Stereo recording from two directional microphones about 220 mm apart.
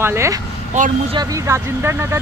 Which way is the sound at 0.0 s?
10° right (ahead or behind).